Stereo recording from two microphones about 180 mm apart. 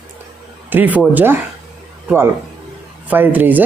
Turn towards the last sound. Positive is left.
turn(degrees=-10)  # may be behind; listen again after turning